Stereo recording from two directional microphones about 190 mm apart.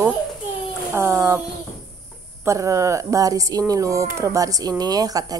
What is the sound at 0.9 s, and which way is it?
Speech, 15° right (ahead or behind).